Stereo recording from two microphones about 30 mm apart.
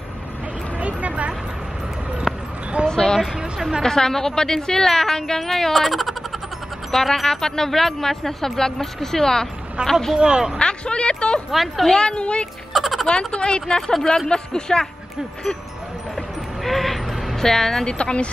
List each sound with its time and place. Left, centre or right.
0.7 s vehicle: right
2.3 s a sound: centre
2.9 s speech: left
5.5 s speech: centre
9.8 s speech: right
10.6 s speech: left
11.5 s speech: centre
12.0 s a woman's voice: left
12.7 s a sound: centre
13.3 s a woman's voice: left
13.7 s speech: centre
16.6 s a sound: centre
17.4 s speech: centre
17.8 s a woman's voice: left